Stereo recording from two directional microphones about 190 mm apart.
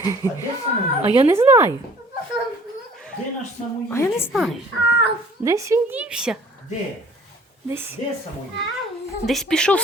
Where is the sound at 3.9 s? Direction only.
10° left (ahead or behind).